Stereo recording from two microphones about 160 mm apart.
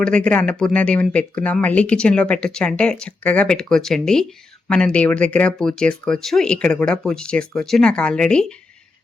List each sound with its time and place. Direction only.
0.0 s speech: 5° left (ahead or behind)